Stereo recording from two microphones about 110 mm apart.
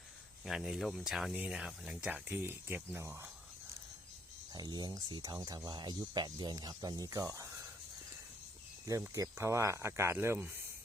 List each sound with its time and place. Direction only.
0.4 s speech: 5° right (ahead or behind); by 3.2 s 25° right (ahead or behind)
4.5 s speech: 40° right (ahead or behind)
8.9 s speech: 30° right (ahead or behind)